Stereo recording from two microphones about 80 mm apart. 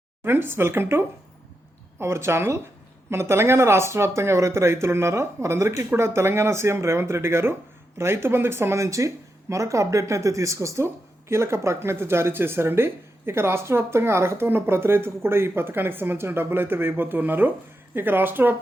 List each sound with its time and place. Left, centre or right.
0.3 s speech: right